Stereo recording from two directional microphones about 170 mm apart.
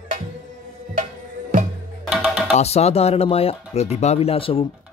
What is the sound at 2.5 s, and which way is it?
Speech, 40° left (ahead or behind).